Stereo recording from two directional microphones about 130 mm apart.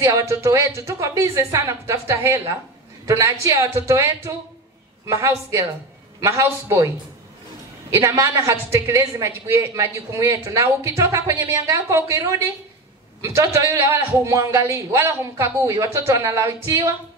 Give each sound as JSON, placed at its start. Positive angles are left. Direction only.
{"t": 0.0, "sound": "a woman's voice", "side_deg": -25}
{"t": 7.9, "sound": "a woman's voice", "side_deg": -20}
{"t": 13.2, "sound": "a woman's voice", "side_deg": -20}